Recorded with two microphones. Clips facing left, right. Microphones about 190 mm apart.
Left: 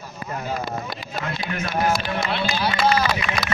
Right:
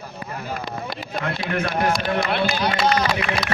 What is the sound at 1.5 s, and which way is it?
A man's voice, 55° right (ahead or behind).